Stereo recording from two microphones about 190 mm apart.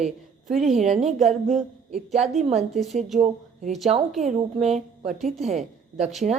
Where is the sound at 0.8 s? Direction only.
35° right (ahead or behind).